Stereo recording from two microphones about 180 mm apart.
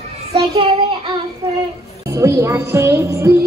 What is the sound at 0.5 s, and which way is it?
Child singing, 25° right (ahead or behind).